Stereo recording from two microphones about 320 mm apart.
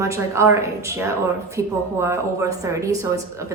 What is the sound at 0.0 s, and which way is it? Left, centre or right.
A woman's voice, centre.